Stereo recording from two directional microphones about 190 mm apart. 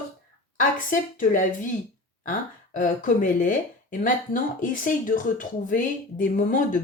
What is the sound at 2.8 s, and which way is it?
Speech, 45° left (ahead or behind).